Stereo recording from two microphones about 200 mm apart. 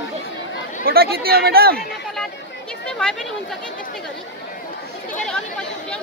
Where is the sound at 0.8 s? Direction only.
50° right (ahead or behind).